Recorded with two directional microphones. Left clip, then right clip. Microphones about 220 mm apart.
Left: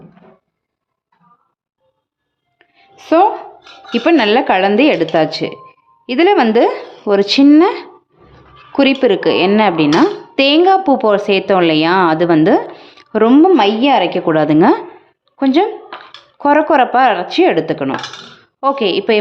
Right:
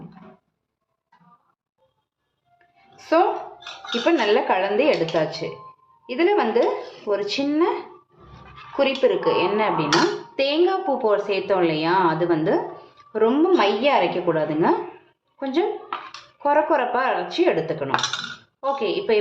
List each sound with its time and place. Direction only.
2.6 s music: 40° left (ahead or behind)
4.0 s a woman's voice: 50° left (ahead or behind)